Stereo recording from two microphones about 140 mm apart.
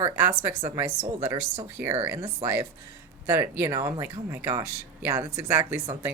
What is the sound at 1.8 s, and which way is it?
Speech, 15° right (ahead or behind).